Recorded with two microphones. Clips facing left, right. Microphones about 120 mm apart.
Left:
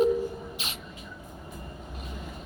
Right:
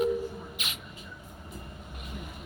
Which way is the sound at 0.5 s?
35° left (ahead or behind).